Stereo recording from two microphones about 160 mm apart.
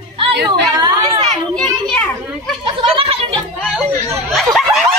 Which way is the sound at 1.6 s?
5° left (ahead or behind).